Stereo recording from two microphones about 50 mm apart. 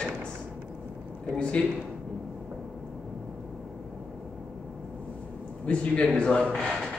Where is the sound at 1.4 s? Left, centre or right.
Left.